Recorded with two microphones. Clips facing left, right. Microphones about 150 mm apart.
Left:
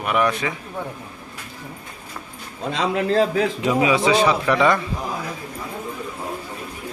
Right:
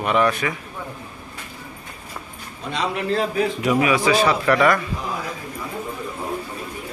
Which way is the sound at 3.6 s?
25° left (ahead or behind).